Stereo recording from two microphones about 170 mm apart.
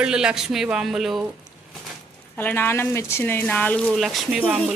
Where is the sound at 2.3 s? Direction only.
10° left (ahead or behind); by 4.5 s 5° right (ahead or behind).